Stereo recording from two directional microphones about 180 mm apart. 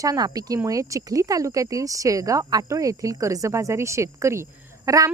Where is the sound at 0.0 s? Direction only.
20° right (ahead or behind).